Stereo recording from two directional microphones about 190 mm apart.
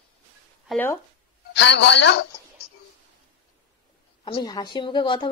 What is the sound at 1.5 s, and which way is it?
Speech, 65° left (ahead or behind).